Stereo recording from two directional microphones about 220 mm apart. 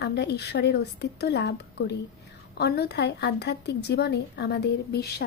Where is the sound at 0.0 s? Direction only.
50° left (ahead or behind).